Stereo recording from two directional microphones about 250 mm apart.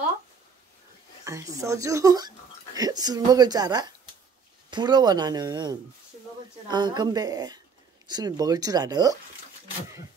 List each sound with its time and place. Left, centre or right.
1.2 s speech: centre